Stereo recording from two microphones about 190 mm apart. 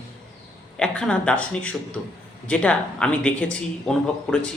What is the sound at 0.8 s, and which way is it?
Speech, 5° left (ahead or behind).